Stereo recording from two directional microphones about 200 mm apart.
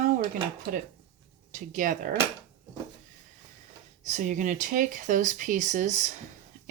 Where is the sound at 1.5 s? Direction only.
40° right (ahead or behind).